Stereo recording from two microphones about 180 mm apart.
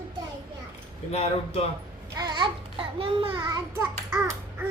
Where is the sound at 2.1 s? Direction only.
25° right (ahead or behind).